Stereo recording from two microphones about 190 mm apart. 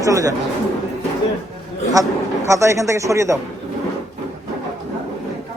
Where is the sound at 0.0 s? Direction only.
15° right (ahead or behind).